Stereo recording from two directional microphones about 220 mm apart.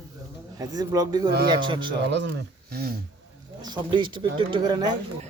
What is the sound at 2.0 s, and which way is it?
Speech, 50° right (ahead or behind).